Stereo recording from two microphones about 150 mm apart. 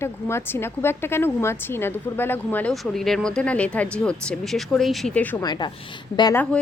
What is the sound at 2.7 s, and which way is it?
Speech, centre (ahead or behind).